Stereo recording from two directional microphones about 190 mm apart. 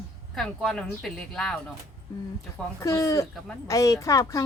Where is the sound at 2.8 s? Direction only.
20° left (ahead or behind).